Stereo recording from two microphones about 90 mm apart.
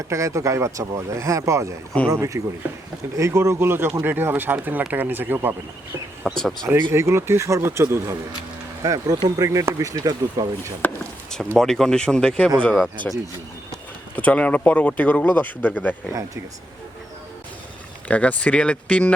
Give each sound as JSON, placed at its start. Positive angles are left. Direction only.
{"t": 0.1, "sound": "speech", "side_deg": -35}
{"t": 6.3, "sound": "speech", "side_deg": 5}
{"t": 6.9, "sound": "speech", "side_deg": -30}
{"t": 8.8, "sound": "speech", "side_deg": -45}
{"t": 11.3, "sound": "speech", "side_deg": 5}
{"t": 14.2, "sound": "speech", "side_deg": 15}
{"t": 18.1, "sound": "speech", "side_deg": 15}